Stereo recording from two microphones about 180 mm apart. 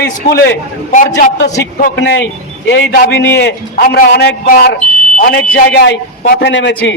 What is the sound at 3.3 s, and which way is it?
A man's voice, 65° left (ahead or behind).